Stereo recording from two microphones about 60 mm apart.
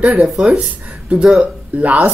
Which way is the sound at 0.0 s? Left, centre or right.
Right.